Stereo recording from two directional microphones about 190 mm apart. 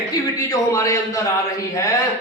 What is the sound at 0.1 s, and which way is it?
A man's voice, 20° left (ahead or behind).